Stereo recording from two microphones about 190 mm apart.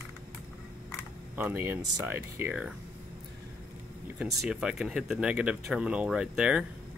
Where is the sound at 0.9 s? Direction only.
10° right (ahead or behind).